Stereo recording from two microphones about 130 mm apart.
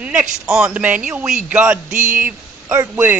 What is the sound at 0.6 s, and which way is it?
A man's voice, 10° right (ahead or behind).